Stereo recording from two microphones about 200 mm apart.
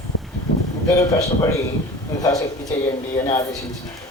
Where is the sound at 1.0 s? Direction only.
15° left (ahead or behind).